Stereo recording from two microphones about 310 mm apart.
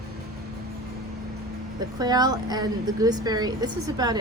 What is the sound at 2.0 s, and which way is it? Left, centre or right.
A woman's voice, centre.